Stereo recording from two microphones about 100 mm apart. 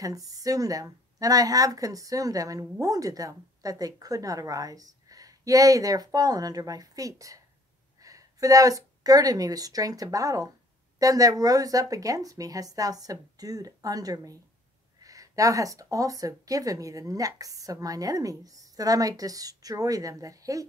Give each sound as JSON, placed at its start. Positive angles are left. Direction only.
{"t": 0.0, "sound": "a woman's voice", "side_deg": -35}